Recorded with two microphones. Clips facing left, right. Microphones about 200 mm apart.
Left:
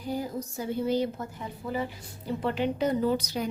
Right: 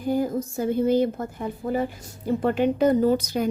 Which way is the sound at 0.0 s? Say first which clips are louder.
Right 8 dB; 50° right (ahead or behind).